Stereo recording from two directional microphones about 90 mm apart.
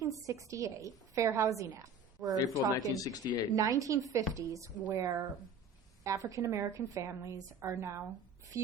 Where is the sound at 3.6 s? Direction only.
40° right (ahead or behind).